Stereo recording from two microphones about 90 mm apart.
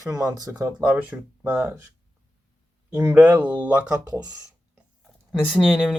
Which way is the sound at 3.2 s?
15° right (ahead or behind).